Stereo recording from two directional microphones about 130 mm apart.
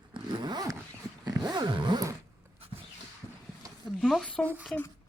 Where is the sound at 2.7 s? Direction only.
40° right (ahead or behind).